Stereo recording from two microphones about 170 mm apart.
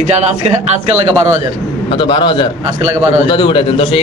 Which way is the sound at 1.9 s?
30° left (ahead or behind).